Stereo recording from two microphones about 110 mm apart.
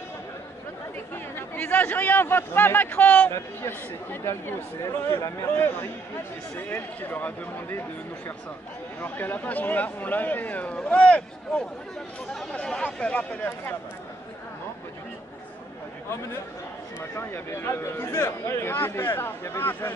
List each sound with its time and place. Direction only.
1.1 s speech: 20° left (ahead or behind)
9.0 s speech: 15° left (ahead or behind)
17.1 s speech: 25° left (ahead or behind)